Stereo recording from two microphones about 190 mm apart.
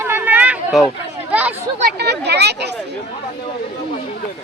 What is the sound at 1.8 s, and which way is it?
Speech, 60° right (ahead or behind).